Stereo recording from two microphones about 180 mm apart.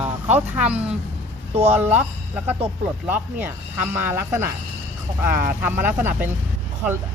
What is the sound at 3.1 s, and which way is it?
Speech, 10° right (ahead or behind).